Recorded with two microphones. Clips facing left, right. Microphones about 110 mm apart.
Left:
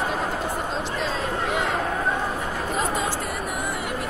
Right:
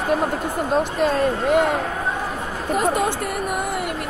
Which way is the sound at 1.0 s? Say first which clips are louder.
Right 6 dB; 55° right (ahead or behind).